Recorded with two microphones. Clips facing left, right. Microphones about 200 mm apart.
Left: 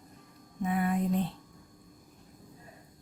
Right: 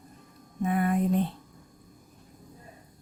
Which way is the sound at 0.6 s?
55° right (ahead or behind).